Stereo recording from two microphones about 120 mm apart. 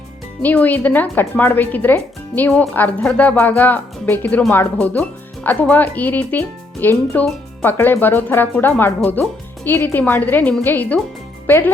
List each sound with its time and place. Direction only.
0.4 s a child's voice: 15° left (ahead or behind)